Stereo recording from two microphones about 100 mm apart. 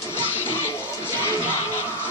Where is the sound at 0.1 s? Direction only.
20° left (ahead or behind).